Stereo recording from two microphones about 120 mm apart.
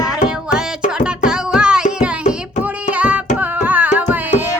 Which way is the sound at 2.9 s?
10° right (ahead or behind).